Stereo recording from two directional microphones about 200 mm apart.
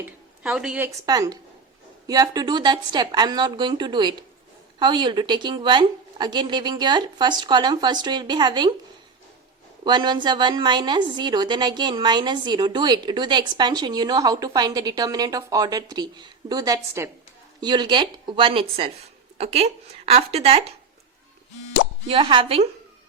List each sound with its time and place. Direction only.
0.4 s a woman's voice: 5° right (ahead or behind)
0.9 s a woman's voice: 20° right (ahead or behind)
9.8 s a woman's voice: 20° right (ahead or behind)
22.1 s a woman's voice: 25° right (ahead or behind)